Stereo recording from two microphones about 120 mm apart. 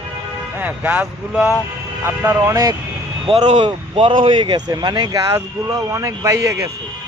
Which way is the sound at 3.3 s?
70° right (ahead or behind).